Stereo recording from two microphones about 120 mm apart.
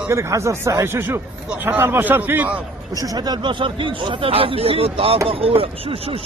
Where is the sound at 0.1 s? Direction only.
25° right (ahead or behind).